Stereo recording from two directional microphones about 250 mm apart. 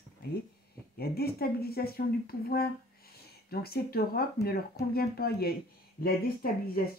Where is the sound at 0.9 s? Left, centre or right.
Left.